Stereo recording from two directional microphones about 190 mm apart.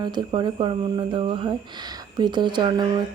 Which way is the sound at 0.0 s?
25° right (ahead or behind).